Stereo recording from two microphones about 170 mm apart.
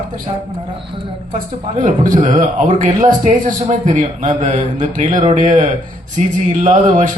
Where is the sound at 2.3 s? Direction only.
45° right (ahead or behind).